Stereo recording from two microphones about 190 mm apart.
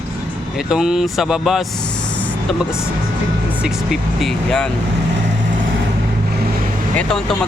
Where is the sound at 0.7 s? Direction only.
5° right (ahead or behind).